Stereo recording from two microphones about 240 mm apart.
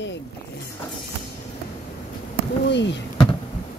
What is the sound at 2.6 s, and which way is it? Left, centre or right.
Speech, left.